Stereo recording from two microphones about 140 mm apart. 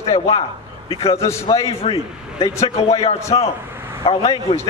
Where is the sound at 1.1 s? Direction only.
20° left (ahead or behind).